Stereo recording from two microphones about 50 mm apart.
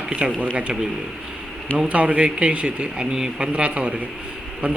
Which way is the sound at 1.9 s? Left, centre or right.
Right.